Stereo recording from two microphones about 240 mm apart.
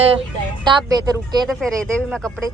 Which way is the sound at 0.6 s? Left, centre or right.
Centre.